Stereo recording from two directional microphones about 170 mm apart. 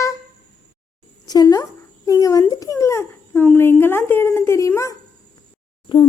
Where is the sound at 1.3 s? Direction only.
20° left (ahead or behind).